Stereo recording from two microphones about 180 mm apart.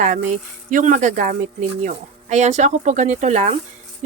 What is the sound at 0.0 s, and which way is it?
Speech, 45° right (ahead or behind).